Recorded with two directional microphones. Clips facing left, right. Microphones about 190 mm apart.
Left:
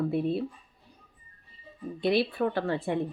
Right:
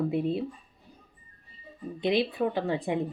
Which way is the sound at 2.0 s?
20° right (ahead or behind).